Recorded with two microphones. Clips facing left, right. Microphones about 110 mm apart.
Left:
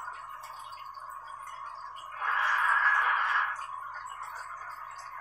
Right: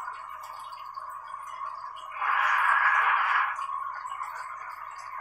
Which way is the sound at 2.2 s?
45° right (ahead or behind).